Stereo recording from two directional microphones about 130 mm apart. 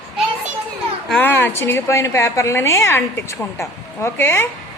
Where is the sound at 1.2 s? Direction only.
15° left (ahead or behind).